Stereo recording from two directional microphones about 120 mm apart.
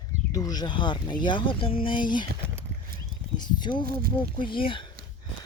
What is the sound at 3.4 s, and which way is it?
Speech, 40° left (ahead or behind).